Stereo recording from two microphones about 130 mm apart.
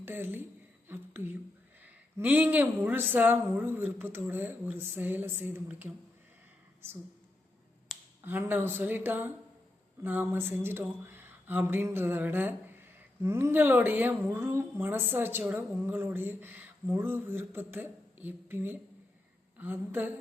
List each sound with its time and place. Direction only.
0.0 s a woman's voice: 15° right (ahead or behind)
8.2 s speech: 15° right (ahead or behind)